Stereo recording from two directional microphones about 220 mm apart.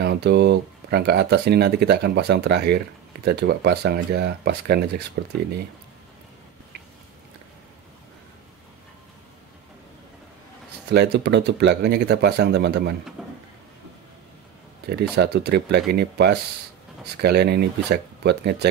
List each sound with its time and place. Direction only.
0.0 s speech: 50° right (ahead or behind)
10.9 s speech: 50° right (ahead or behind)
13.2 s a sound: 5° right (ahead or behind)
14.9 s speech: 50° right (ahead or behind)